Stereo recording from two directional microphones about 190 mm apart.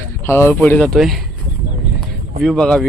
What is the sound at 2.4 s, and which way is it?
Speech, centre (ahead or behind).